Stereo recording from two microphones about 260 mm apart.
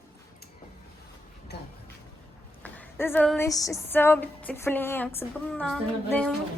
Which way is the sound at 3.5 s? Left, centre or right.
Centre.